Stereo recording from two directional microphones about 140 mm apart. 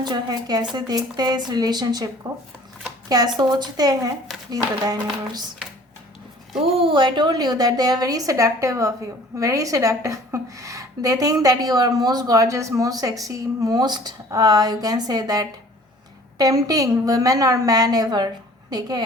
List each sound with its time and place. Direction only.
0.0 s a woman's voice: 30° right (ahead or behind)
6.7 s a woman's voice: 35° right (ahead or behind)